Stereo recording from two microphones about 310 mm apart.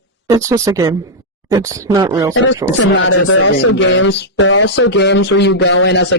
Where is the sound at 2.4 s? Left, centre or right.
Left.